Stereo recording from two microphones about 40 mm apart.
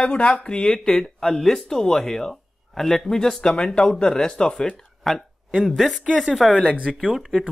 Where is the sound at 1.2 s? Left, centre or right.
Centre.